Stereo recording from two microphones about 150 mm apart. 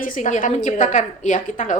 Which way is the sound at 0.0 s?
60° left (ahead or behind).